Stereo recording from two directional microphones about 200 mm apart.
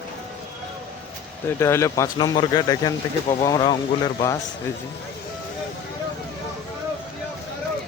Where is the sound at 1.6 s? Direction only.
15° left (ahead or behind).